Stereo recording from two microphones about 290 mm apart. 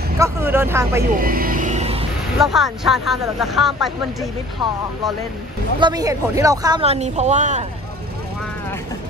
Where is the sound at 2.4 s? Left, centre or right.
Centre.